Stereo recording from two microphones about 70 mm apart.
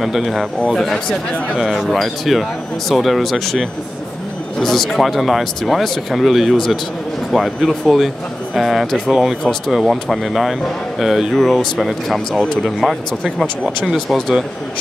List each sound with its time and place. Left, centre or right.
0.0 s speech: centre